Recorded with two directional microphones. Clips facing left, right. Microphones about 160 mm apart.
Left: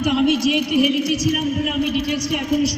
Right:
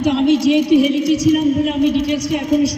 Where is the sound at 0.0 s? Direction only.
30° right (ahead or behind).